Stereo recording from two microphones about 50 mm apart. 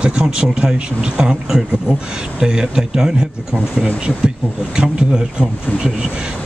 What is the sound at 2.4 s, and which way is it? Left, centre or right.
Speech, centre.